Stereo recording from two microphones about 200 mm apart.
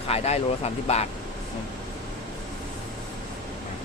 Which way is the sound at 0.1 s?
30° left (ahead or behind).